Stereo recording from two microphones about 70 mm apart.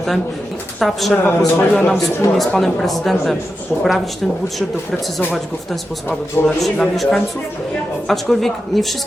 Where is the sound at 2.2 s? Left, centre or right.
Left.